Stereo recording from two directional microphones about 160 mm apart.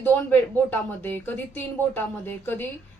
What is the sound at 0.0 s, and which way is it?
Speech, 10° left (ahead or behind).